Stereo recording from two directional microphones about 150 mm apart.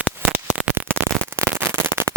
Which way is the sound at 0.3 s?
10° right (ahead or behind).